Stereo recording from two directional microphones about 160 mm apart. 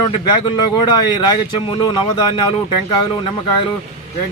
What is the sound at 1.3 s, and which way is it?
Speech, 30° left (ahead or behind).